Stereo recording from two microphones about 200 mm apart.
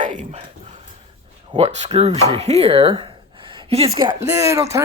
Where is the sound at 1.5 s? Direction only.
35° right (ahead or behind).